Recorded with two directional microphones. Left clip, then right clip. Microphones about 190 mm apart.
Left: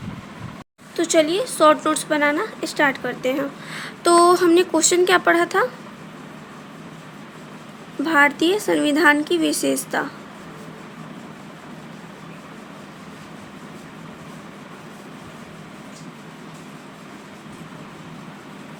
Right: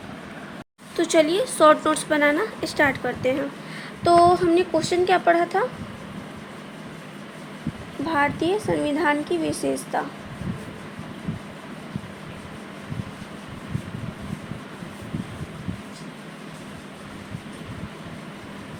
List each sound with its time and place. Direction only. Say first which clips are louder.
0.9 s a woman's voice: left 1 dB; 10° left (ahead or behind)
3.8 s speech: left 1 dB; 35° left (ahead or behind)
8.0 s speech: left 6 dB; 35° left (ahead or behind)